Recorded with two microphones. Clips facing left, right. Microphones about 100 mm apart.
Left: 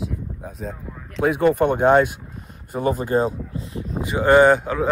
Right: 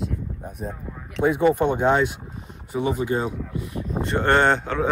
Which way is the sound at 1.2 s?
65° left (ahead or behind).